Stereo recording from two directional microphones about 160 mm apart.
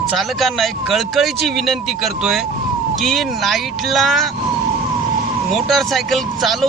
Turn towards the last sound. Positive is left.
turn(degrees=0)  # may be behind; listen again after turning